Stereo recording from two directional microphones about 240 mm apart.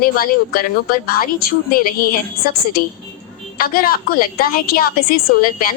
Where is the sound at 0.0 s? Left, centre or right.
Left.